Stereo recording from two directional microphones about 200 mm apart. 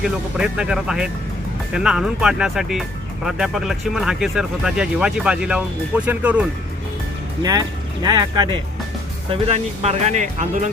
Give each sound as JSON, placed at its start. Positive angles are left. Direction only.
{"t": 0.0, "sound": "speech", "side_deg": -5}
{"t": 8.0, "sound": "speech", "side_deg": -20}
{"t": 9.3, "sound": "speech", "side_deg": -30}